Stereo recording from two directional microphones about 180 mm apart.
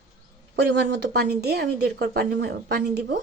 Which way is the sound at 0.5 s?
70° right (ahead or behind).